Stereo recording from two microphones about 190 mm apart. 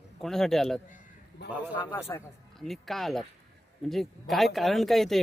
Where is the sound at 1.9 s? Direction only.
15° left (ahead or behind).